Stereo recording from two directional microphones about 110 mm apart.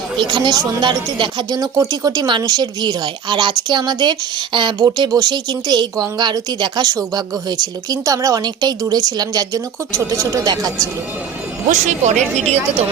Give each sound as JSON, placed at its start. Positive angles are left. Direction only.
{"t": 0.2, "sound": "speech", "side_deg": -45}
{"t": 11.7, "sound": "speech", "side_deg": -90}